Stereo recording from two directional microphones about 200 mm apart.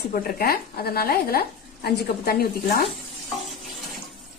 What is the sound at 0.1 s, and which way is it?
A woman's voice, 50° left (ahead or behind).